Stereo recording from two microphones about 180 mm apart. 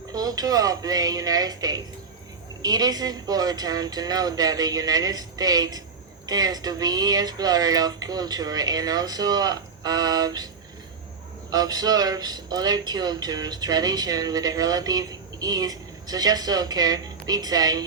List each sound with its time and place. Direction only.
0.1 s speech: 20° right (ahead or behind)
11.5 s speech: 20° right (ahead or behind)